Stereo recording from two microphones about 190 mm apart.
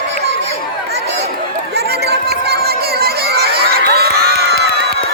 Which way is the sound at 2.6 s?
55° right (ahead or behind).